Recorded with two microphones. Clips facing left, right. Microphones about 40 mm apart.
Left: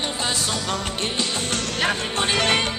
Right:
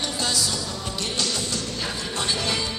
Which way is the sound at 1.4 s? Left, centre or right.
Left.